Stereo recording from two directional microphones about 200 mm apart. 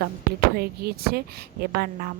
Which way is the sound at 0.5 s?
50° right (ahead or behind).